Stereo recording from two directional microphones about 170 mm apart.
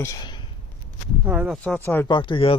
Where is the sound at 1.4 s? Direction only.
10° left (ahead or behind).